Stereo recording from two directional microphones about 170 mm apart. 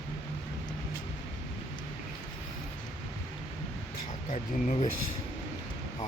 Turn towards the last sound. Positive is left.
turn(degrees=45)  # may be behind; listen again after turning